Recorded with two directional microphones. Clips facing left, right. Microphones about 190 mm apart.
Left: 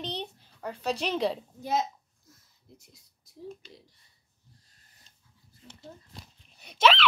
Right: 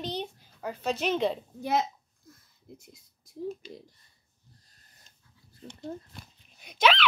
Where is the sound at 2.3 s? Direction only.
50° right (ahead or behind).